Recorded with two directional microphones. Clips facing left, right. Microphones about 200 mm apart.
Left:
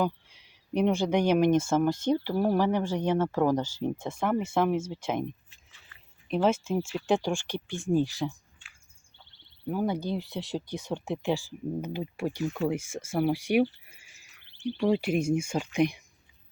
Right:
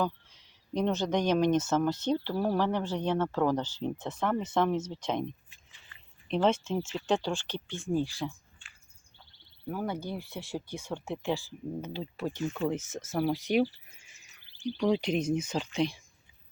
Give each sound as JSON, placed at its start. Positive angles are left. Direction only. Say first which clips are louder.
{"t": 0.0, "sound": "speech", "louder": "left 3 dB", "side_deg": 10}
{"t": 9.6, "sound": "speech", "louder": "left 5 dB", "side_deg": 15}